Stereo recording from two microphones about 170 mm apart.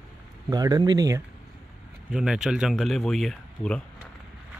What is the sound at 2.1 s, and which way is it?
Speech, 5° right (ahead or behind).